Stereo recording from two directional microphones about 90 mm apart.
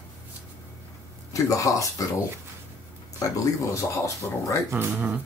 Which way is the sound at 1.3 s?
40° left (ahead or behind).